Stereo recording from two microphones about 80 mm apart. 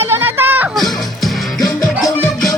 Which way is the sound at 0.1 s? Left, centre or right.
Right.